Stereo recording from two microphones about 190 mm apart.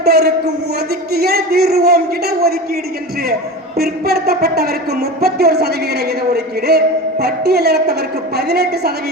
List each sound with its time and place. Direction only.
0.0 s speech: 55° right (ahead or behind)
3.8 s speech: 55° right (ahead or behind)